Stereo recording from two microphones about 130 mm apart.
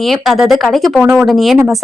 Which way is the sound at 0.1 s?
Centre (ahead or behind).